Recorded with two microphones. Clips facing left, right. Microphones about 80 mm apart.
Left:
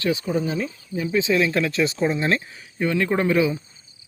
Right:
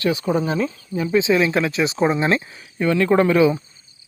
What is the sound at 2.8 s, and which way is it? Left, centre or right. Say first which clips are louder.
Speech: right 5 dB; right.